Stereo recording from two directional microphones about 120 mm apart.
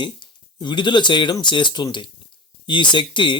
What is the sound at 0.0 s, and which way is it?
Speech, 40° left (ahead or behind).